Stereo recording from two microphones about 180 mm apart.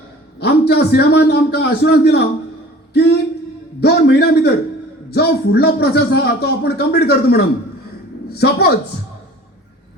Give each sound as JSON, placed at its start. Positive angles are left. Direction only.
{"t": 0.4, "sound": "a man's voice", "side_deg": 65}